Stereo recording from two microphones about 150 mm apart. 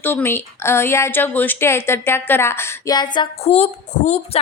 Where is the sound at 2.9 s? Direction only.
30° left (ahead or behind).